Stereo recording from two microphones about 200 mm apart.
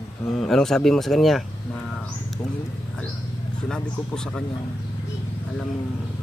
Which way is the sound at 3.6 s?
5° left (ahead or behind).